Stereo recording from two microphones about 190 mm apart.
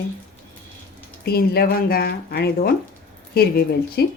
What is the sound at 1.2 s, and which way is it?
A woman's voice, 55° left (ahead or behind).